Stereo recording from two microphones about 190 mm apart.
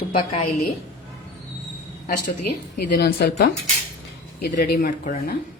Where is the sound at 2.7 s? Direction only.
55° left (ahead or behind).